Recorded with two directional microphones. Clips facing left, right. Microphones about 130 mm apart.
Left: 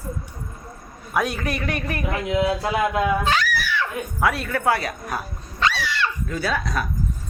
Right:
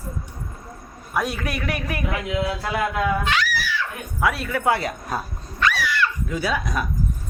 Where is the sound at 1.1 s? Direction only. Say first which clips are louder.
Left 1 dB; centre (ahead or behind).